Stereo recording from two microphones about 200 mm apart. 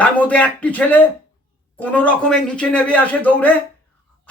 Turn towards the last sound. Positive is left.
turn(degrees=10)  # may be behind; listen again after turning